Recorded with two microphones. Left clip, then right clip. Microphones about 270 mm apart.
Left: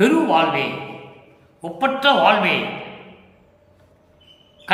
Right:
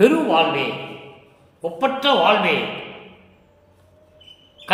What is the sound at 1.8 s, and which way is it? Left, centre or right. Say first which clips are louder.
Speech: left 2 dB; centre.